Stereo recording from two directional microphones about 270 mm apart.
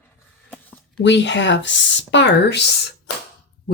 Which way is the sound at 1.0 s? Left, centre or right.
Left.